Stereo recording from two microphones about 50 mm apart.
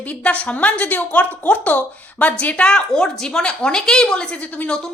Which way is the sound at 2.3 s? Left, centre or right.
Left.